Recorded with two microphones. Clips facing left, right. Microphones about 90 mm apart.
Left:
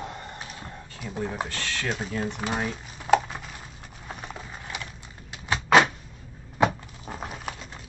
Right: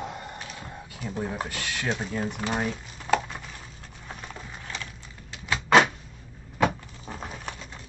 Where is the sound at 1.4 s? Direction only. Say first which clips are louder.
Even; 15° right (ahead or behind).